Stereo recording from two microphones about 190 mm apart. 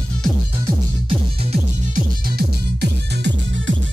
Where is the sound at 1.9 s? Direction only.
55° right (ahead or behind); by 3.7 s 70° right (ahead or behind).